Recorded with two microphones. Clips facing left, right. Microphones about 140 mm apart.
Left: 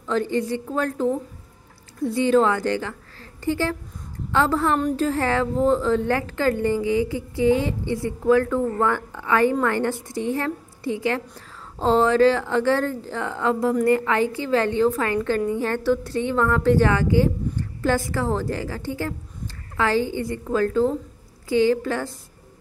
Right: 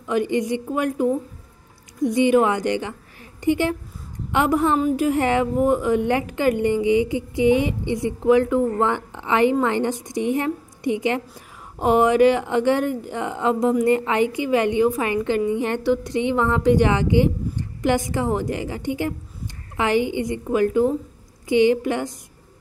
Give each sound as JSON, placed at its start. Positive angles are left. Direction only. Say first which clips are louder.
{"t": 0.0, "sound": "a woman's voice", "louder": "right 2 dB", "side_deg": -15}